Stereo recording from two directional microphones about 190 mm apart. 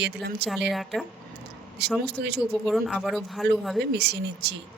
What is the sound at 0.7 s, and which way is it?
Speech, centre (ahead or behind).